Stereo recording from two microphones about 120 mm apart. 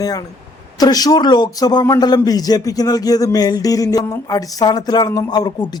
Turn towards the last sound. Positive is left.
turn(degrees=35)  # may be behind; listen again after turning